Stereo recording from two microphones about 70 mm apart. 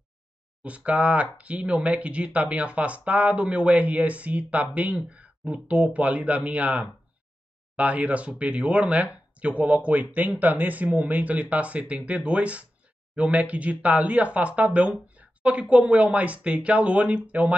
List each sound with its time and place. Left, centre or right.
0.7 s speech: centre